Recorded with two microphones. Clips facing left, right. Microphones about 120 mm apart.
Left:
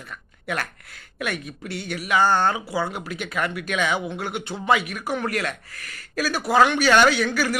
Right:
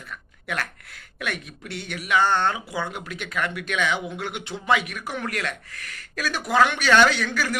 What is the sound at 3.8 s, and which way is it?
Speech, 40° left (ahead or behind).